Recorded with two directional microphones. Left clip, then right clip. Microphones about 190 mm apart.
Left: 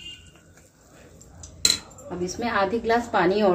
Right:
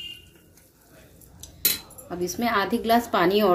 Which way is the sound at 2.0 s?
45° right (ahead or behind).